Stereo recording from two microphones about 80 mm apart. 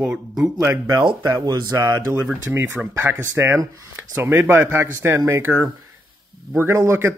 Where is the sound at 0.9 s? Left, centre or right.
Right.